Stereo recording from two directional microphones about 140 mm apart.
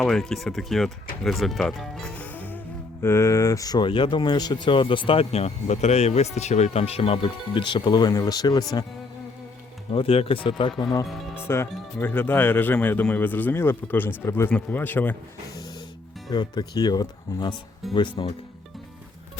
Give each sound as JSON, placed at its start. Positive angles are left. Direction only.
{"t": 0.0, "sound": "speech", "side_deg": 5}
{"t": 9.9, "sound": "speech", "side_deg": 40}
{"t": 11.0, "sound": "speech", "side_deg": 0}
{"t": 11.4, "sound": "speech", "side_deg": 20}
{"t": 16.3, "sound": "speech", "side_deg": 30}
{"t": 17.8, "sound": "speech", "side_deg": 0}